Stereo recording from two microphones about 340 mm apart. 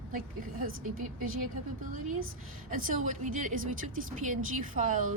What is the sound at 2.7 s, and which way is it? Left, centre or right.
A woman's voice, right.